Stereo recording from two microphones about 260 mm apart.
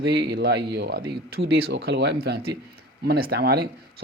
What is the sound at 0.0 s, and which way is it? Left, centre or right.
Speech, right.